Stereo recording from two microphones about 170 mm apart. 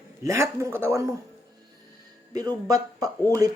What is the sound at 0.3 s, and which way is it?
Speech, 15° right (ahead or behind).